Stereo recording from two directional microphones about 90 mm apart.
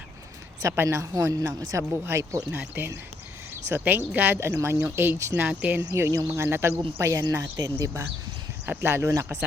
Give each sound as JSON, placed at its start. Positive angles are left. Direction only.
{"t": 0.8, "sound": "a woman's voice", "side_deg": -30}
{"t": 2.0, "sound": "speech", "side_deg": -30}
{"t": 5.4, "sound": "speech", "side_deg": -20}
{"t": 5.8, "sound": "a woman's voice", "side_deg": -35}
{"t": 8.6, "sound": "speech", "side_deg": -25}